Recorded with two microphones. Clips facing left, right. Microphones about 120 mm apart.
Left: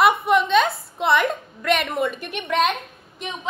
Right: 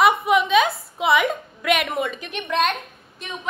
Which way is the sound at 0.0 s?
Centre (ahead or behind).